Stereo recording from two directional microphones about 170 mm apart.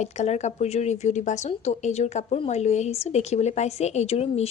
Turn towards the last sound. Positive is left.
turn(degrees=35)  # may be behind; listen again after turning